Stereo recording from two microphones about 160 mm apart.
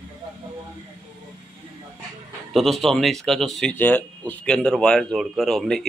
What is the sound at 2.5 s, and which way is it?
Speech, centre (ahead or behind).